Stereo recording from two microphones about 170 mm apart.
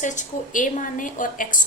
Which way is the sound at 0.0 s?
45° left (ahead or behind).